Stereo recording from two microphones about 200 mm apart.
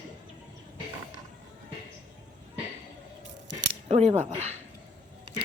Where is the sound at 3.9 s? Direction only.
35° right (ahead or behind).